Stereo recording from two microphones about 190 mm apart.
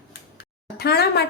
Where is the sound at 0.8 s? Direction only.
55° left (ahead or behind).